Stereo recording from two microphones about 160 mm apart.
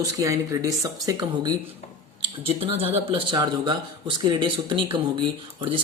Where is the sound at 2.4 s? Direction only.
35° right (ahead or behind).